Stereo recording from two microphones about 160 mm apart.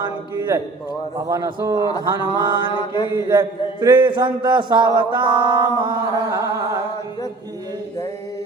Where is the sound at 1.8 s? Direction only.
25° left (ahead or behind).